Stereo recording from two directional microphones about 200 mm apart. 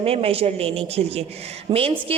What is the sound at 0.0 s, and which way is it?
A woman's voice, 30° right (ahead or behind).